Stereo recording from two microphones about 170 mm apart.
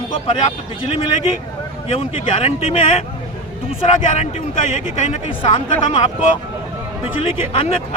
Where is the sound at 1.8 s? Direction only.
35° left (ahead or behind).